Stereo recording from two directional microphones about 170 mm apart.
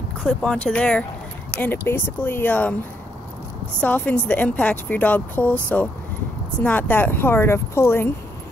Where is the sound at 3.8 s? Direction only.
10° left (ahead or behind).